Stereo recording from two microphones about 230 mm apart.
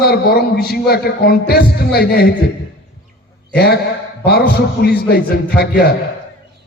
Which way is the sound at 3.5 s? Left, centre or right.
Left.